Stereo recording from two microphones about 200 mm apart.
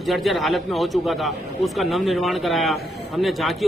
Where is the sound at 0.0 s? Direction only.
Centre (ahead or behind).